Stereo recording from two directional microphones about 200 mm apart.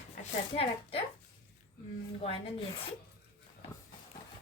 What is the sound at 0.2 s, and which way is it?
Speech, 30° left (ahead or behind).